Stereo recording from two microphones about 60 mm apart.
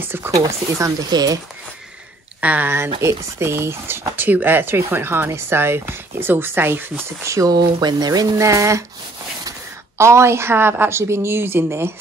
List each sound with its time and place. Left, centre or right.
0.0 s speech: right
0.7 s speech: right
2.4 s speech: right
2.7 s speech: right
4.2 s speech: right
7.2 s speech: right
8.0 s speech: right
9.9 s speech: right